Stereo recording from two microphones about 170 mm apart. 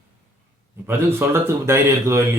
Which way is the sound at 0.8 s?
15° right (ahead or behind).